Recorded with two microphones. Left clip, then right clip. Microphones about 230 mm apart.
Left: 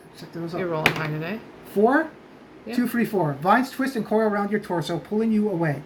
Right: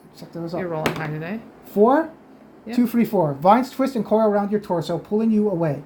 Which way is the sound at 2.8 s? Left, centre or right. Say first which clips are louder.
Right 4 dB; right.